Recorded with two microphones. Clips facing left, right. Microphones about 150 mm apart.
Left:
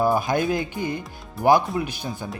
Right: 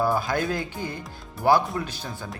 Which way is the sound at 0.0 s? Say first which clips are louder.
Left 3 dB; 20° left (ahead or behind).